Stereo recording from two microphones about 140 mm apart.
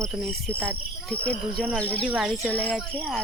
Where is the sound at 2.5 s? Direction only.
10° left (ahead or behind).